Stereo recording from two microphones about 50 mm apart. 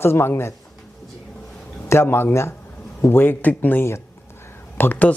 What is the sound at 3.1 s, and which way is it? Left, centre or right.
Speech, left.